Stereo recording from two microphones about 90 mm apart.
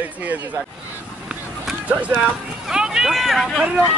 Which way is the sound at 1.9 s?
15° right (ahead or behind).